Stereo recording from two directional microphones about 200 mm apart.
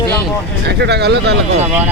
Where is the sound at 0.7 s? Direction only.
55° right (ahead or behind).